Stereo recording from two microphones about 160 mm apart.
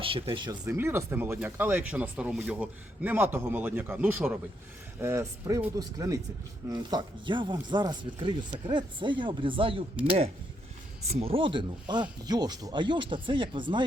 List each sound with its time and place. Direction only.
0.0 s speech: 35° right (ahead or behind)
0.7 s speech: 15° right (ahead or behind); by 13.8 s 30° right (ahead or behind)